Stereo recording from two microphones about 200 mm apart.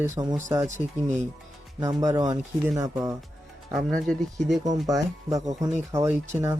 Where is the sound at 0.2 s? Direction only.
15° right (ahead or behind).